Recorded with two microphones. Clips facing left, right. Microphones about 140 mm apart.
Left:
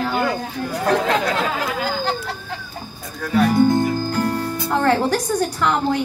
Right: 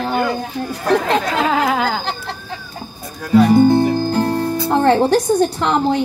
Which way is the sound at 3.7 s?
30° right (ahead or behind).